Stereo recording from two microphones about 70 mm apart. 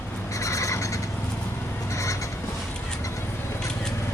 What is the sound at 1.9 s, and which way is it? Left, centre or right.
Crow, left.